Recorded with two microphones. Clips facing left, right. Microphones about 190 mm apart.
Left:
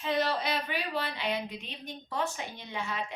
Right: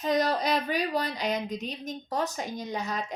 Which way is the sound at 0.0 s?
40° right (ahead or behind).